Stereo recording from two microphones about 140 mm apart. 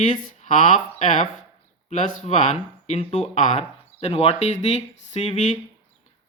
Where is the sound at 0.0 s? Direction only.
65° left (ahead or behind).